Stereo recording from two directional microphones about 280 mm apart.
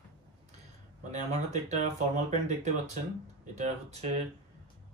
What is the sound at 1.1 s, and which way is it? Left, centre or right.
Speech, right.